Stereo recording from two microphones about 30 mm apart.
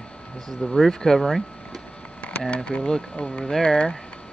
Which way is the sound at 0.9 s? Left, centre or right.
Centre.